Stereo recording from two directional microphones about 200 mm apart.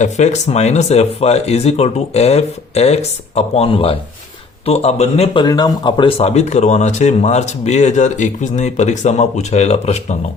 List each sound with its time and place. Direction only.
0.0 s speech: 35° left (ahead or behind)